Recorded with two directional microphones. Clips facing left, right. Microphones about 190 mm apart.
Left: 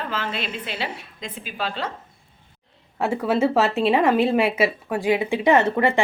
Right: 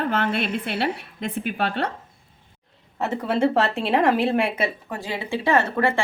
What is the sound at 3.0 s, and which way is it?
Speech, 10° left (ahead or behind).